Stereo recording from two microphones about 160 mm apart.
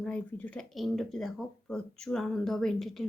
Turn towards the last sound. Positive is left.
turn(degrees=0)  # may be behind; listen again after turning